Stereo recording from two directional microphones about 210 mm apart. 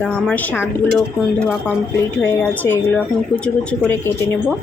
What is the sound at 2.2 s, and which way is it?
Speech, 10° left (ahead or behind).